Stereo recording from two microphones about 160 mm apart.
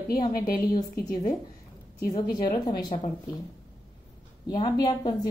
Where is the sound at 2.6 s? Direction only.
25° left (ahead or behind).